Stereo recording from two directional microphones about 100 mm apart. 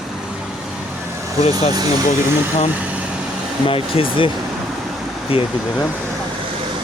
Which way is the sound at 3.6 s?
65° left (ahead or behind).